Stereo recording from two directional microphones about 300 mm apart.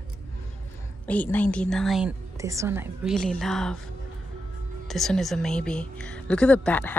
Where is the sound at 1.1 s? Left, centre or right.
Centre.